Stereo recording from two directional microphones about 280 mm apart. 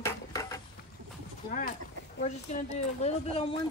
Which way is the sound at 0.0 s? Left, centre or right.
Centre.